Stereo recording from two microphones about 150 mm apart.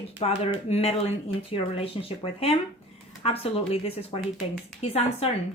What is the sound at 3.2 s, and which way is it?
Speech, 40° left (ahead or behind).